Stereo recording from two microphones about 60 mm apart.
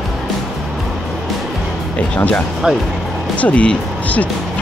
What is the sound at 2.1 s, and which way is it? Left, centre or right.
Speech, left.